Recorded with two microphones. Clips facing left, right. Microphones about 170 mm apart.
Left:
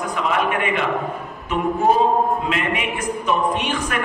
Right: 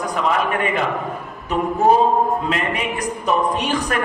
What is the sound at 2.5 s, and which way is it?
A man's voice, 40° right (ahead or behind).